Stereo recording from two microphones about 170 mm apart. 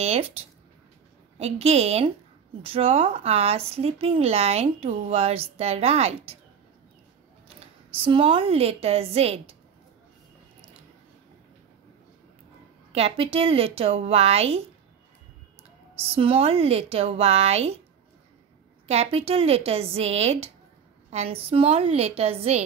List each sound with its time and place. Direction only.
0.0 s speech: 40° right (ahead or behind)
1.4 s speech: 40° right (ahead or behind)
7.4 s speech: 30° right (ahead or behind)
12.9 s speech: 35° right (ahead or behind)
16.2 s speech: 35° right (ahead or behind)
18.9 s speech: 35° right (ahead or behind)